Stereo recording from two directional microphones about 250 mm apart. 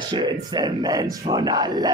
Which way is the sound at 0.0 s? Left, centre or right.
Centre.